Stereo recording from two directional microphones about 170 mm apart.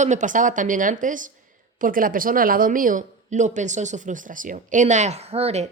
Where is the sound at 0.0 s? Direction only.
45° right (ahead or behind).